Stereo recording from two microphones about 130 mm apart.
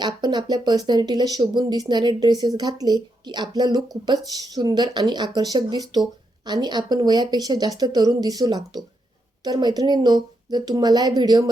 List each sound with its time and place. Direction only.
0.0 s speech: 35° right (ahead or behind)